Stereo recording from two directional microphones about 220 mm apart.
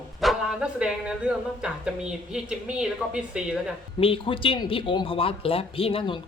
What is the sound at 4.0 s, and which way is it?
Speech, 25° left (ahead or behind).